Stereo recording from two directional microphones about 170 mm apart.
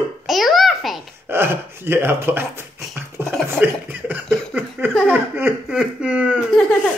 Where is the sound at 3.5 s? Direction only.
10° right (ahead or behind).